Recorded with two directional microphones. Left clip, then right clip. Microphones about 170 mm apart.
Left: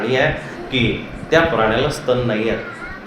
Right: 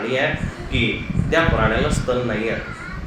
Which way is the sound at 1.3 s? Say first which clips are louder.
Left 4 dB; 25° left (ahead or behind).